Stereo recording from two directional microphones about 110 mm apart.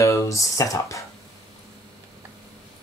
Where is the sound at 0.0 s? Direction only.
30° left (ahead or behind).